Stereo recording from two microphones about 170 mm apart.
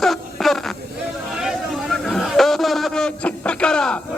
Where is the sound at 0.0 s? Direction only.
Centre (ahead or behind).